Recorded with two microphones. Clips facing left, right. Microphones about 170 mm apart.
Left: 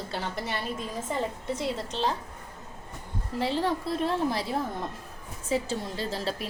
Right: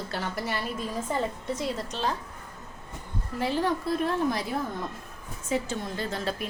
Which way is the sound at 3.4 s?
25° left (ahead or behind).